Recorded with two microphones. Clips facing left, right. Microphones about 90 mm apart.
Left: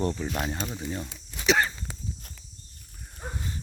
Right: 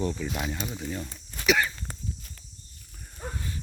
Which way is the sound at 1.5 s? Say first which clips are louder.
Left 1 dB; 35° left (ahead or behind).